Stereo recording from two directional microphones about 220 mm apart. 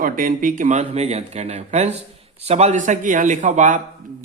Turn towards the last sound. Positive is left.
turn(degrees=-35)  # may be behind; listen again after turning